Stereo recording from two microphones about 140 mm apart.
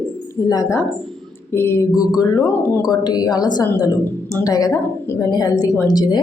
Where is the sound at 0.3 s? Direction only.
25° left (ahead or behind).